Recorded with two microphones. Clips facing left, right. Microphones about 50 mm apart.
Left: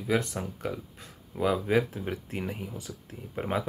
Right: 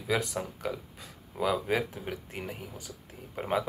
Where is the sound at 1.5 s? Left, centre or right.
Centre.